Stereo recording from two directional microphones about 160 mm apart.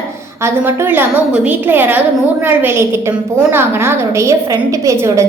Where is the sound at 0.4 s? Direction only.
15° right (ahead or behind).